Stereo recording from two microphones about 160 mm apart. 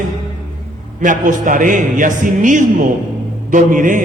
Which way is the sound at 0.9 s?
50° right (ahead or behind).